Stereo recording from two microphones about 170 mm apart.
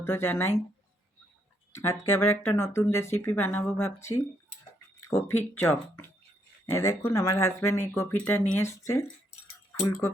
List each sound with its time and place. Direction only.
0.0 s speech: 15° left (ahead or behind)
1.7 s speech: 15° left (ahead or behind)